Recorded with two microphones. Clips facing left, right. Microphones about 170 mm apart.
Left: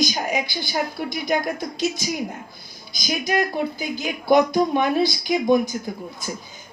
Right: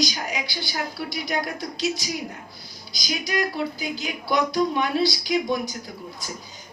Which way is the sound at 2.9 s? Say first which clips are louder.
Left 4 dB; 50° left (ahead or behind).